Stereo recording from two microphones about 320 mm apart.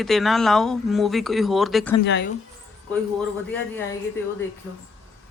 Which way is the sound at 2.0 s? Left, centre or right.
Left.